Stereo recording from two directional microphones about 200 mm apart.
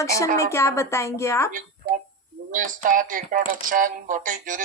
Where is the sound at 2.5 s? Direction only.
40° right (ahead or behind).